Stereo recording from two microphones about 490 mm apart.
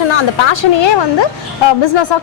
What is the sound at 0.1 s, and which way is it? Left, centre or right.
A woman's voice, left.